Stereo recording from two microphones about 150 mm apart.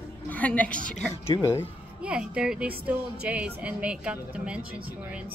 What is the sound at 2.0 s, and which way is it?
A woman's voice, 10° right (ahead or behind).